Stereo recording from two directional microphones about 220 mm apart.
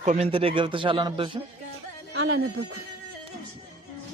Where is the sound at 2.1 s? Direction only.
65° right (ahead or behind).